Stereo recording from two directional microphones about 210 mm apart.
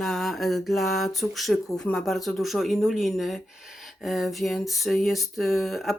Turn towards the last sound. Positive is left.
turn(degrees=0)  # may be behind; listen again after turning